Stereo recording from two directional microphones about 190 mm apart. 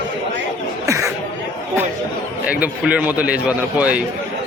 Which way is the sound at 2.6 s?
5° right (ahead or behind).